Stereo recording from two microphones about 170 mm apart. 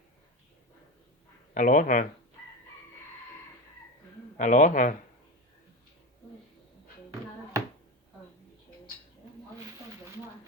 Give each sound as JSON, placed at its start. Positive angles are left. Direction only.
{"t": 1.5, "sound": "speech", "side_deg": 50}
{"t": 4.4, "sound": "speech", "side_deg": 50}